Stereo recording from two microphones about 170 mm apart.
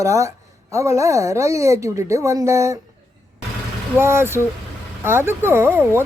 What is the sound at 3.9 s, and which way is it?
A woman's voice, 15° right (ahead or behind).